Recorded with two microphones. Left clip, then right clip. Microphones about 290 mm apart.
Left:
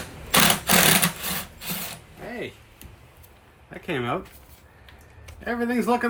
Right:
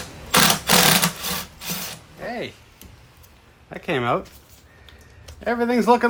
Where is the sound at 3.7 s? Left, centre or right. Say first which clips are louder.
Right 5 dB; right.